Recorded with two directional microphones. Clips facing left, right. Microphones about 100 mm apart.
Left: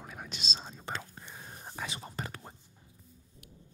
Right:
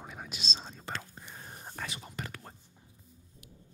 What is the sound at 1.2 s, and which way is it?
Whispering, centre (ahead or behind).